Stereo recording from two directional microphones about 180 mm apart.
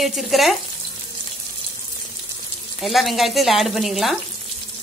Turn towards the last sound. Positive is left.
turn(degrees=0)  # may be behind; listen again after turning